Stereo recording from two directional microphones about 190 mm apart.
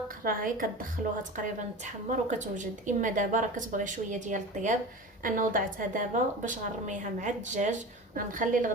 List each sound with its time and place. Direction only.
0.3 s a woman's voice: 45° right (ahead or behind)